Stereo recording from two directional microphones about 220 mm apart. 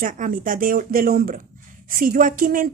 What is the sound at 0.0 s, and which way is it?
A woman's voice, 35° right (ahead or behind).